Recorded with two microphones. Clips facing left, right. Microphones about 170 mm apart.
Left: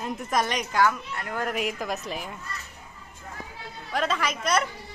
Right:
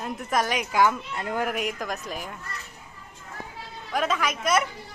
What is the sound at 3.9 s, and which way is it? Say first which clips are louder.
Speech: right 1 dB; 5° right (ahead or behind).